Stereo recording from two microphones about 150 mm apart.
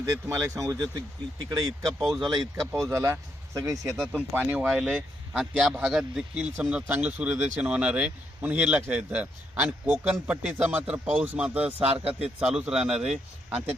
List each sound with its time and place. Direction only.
0.0 s speech: 20° right (ahead or behind)
2.0 s a man's voice: centre (ahead or behind)
2.2 s speech: 25° right (ahead or behind)
3.9 s a man's voice: 5° left (ahead or behind)
4.4 s a man's voice: 10° right (ahead or behind)
4.6 s a man's voice: centre (ahead or behind)